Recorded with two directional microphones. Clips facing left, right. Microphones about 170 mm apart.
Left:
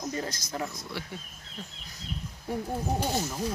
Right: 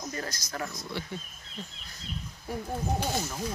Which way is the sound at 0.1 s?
20° left (ahead or behind).